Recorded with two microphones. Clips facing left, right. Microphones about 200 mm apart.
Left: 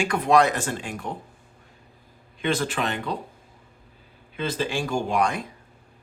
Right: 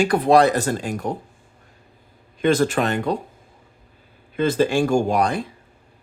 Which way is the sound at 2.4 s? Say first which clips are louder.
Right 7 dB; 45° right (ahead or behind).